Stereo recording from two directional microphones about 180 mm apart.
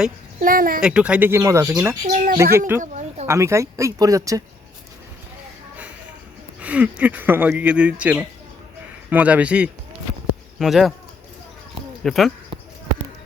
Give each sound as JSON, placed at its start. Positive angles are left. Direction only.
{"t": 0.3, "sound": "speech", "side_deg": -50}
{"t": 0.8, "sound": "speech", "side_deg": -5}
{"t": 2.0, "sound": "speech", "side_deg": -50}
{"t": 2.6, "sound": "speech", "side_deg": -15}
{"t": 2.8, "sound": "a sound", "side_deg": -40}
{"t": 3.2, "sound": "speech", "side_deg": -15}
{"t": 6.6, "sound": "speech", "side_deg": -5}
{"t": 12.0, "sound": "speech", "side_deg": 0}